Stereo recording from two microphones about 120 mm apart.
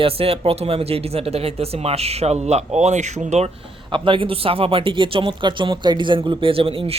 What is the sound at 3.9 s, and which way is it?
A man's voice, 45° right (ahead or behind).